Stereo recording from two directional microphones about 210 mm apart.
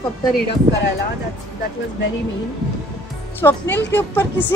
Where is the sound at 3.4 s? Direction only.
10° left (ahead or behind).